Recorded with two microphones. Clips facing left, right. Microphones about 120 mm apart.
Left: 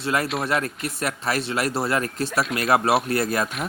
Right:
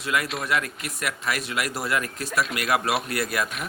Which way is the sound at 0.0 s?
35° left (ahead or behind).